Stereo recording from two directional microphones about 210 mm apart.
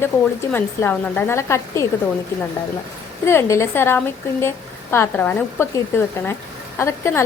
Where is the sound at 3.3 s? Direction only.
10° left (ahead or behind).